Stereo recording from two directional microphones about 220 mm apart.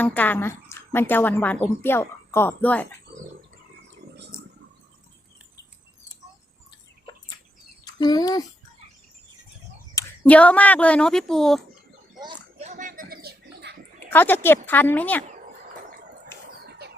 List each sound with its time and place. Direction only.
0.0 s a woman's voice: 10° left (ahead or behind)
7.9 s a child's voice: 20° left (ahead or behind)
9.9 s speech: 10° left (ahead or behind)
12.2 s a sound: 25° right (ahead or behind); by 13.7 s 50° right (ahead or behind)
14.1 s a woman's voice: 10° left (ahead or behind)
16.6 s a sound: 45° right (ahead or behind)